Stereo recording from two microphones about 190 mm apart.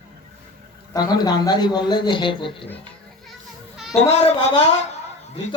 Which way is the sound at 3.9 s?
35° left (ahead or behind).